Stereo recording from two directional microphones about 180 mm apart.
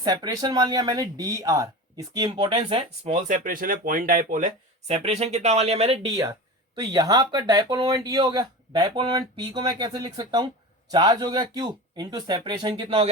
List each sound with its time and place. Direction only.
0.0 s speech: 20° right (ahead or behind); by 4.4 s 50° right (ahead or behind)
4.9 s speech: 35° right (ahead or behind)
6.7 s speech: 20° right (ahead or behind)